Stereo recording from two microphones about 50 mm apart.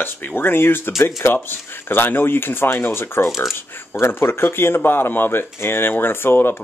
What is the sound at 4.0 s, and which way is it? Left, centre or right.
Speech, left.